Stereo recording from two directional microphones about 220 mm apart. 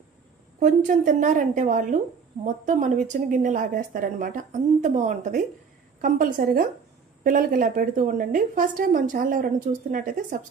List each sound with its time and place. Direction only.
0.6 s a woman's voice: 35° right (ahead or behind)